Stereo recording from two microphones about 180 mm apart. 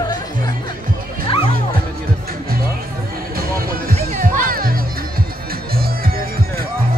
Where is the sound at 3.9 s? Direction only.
50° right (ahead or behind).